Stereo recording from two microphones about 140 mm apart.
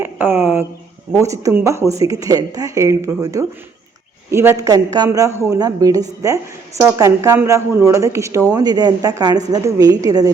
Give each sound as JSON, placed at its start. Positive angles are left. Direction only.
{"t": 0.0, "sound": "a woman's voice", "side_deg": -15}